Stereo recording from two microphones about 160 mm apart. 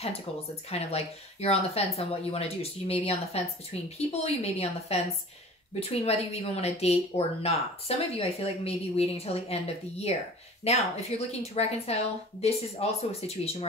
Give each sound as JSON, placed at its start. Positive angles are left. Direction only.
{"t": 0.7, "sound": "a woman's voice", "side_deg": 40}